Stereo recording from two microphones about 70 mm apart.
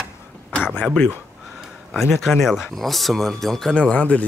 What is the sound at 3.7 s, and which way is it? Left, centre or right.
Speech, centre.